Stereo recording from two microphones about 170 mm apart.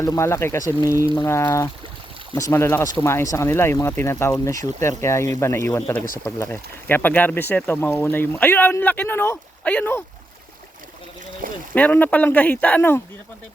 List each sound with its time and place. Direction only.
0.0 s speech: 15° left (ahead or behind)
11.7 s speech: 10° left (ahead or behind)